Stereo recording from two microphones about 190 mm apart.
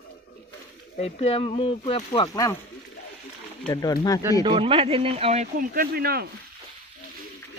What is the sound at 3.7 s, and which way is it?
Speech, 20° left (ahead or behind).